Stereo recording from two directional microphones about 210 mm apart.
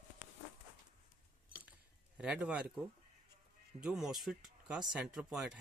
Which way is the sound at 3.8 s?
5° right (ahead or behind).